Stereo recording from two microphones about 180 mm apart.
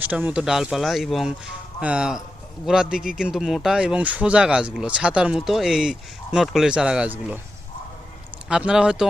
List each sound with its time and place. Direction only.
0.0 s a man's voice: 10° right (ahead or behind)
8.4 s a man's voice: 5° right (ahead or behind)